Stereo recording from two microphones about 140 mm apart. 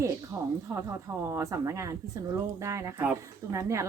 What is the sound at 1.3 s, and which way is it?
Speech, 20° right (ahead or behind).